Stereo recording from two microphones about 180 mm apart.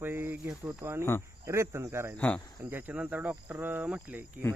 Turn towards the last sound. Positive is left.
turn(degrees=-10)  # may be behind; listen again after turning